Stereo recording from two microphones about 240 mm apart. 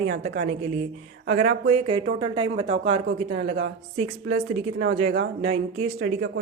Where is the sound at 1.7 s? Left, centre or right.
Right.